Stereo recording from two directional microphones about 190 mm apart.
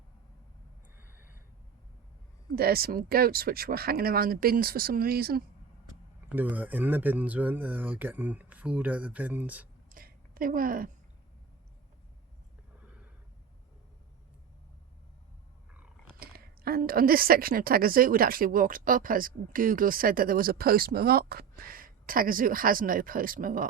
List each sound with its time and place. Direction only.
2.6 s a woman's voice: 55° right (ahead or behind)
6.2 s speech: 10° right (ahead or behind)
9.9 s a sound: 50° right (ahead or behind)
16.1 s a woman's voice: 55° right (ahead or behind)